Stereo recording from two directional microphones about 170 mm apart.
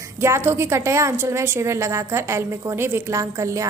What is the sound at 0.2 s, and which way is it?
A woman's voice, 15° right (ahead or behind).